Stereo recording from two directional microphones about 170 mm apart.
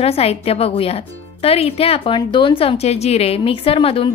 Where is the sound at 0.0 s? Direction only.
35° left (ahead or behind).